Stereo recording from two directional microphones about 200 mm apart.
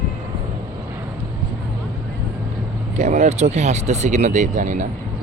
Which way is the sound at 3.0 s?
35° right (ahead or behind).